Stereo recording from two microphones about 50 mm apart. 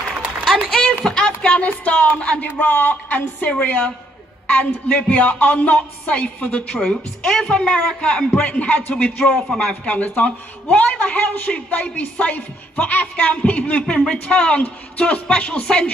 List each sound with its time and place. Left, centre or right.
1.0 s a sound: centre
1.4 s a woman's voice: left
6.8 s speech: centre; by 8.8 s left
8.9 s speech: centre
9.8 s speech: left